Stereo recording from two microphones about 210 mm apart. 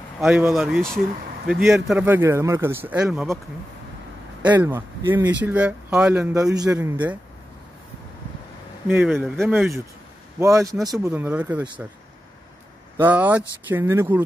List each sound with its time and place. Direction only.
0.2 s speech: 5° right (ahead or behind)
4.4 s speech: 10° right (ahead or behind)
8.8 s speech: 10° right (ahead or behind)
9.1 s speech: centre (ahead or behind)
10.4 s speech: 15° right (ahead or behind)
12.9 s speech: 10° right (ahead or behind)